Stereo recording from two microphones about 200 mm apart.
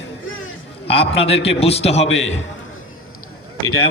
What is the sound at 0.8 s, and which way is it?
A man's voice, 30° left (ahead or behind).